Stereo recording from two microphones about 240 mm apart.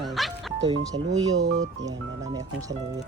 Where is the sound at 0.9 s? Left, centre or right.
Right.